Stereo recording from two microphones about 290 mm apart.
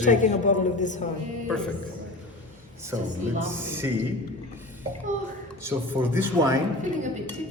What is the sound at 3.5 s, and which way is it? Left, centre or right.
Speech, centre.